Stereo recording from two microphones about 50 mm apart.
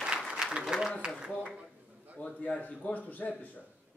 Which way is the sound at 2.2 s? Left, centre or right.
Left.